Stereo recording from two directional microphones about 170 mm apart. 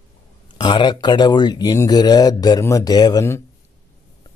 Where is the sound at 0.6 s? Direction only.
25° left (ahead or behind).